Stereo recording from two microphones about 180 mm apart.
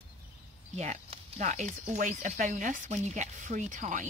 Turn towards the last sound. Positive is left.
turn(degrees=-45)  # may be behind; listen again after turning